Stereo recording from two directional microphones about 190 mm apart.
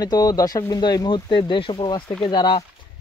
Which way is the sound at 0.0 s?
20° left (ahead or behind).